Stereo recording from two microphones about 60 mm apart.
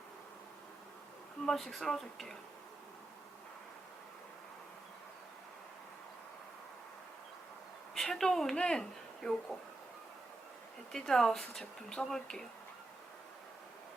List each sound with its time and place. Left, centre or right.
1.5 s speech: centre
7.9 s a sound: centre
10.9 s speech: centre